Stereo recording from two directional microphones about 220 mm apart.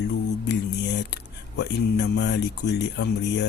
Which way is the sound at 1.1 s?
50° left (ahead or behind).